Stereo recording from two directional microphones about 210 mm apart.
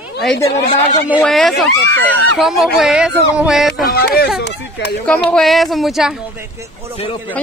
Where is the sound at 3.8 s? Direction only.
45° left (ahead or behind).